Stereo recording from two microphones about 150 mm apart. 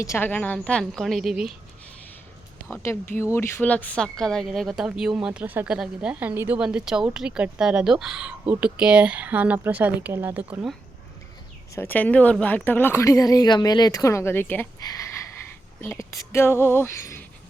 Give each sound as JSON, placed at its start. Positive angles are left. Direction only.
{"t": 0.0, "sound": "speech", "side_deg": 15}
{"t": 2.8, "sound": "speech", "side_deg": 15}
{"t": 11.7, "sound": "speech", "side_deg": 15}
{"t": 14.8, "sound": "a sound", "side_deg": 25}
{"t": 15.8, "sound": "speech", "side_deg": 15}